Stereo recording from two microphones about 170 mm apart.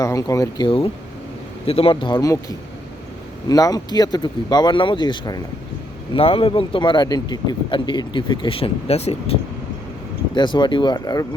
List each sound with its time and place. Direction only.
0.0 s speech: 20° left (ahead or behind); by 9.4 s 35° left (ahead or behind)
10.3 s speech: 25° left (ahead or behind)